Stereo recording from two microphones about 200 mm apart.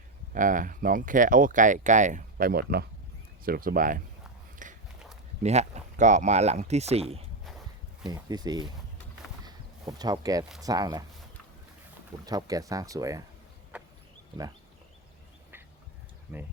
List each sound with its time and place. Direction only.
0.3 s speech: 40° right (ahead or behind)
4.6 s a sound: 40° right (ahead or behind)
5.4 s speech: 35° right (ahead or behind)
8.0 s speech: 20° right (ahead or behind)
9.4 s a sound: 20° right (ahead or behind)
10.6 s speech: 20° right (ahead or behind)
12.2 s speech: 20° right (ahead or behind)
13.7 s a sound: 5° right (ahead or behind)
16.3 s speech: 10° right (ahead or behind)